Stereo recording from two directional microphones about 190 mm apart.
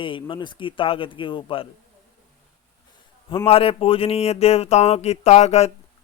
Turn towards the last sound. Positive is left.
turn(degrees=35)  # may be behind; listen again after turning